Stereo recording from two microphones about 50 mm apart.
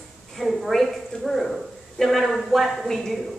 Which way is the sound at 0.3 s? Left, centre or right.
Centre.